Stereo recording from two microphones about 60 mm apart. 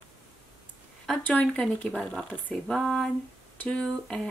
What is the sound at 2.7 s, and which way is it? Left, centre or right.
Speech, centre.